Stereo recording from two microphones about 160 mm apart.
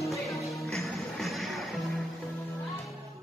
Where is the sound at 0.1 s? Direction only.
Centre (ahead or behind).